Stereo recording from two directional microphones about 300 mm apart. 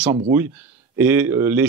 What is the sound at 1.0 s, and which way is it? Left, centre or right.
Speech, centre.